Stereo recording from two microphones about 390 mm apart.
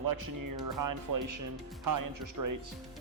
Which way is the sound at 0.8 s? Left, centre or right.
Right.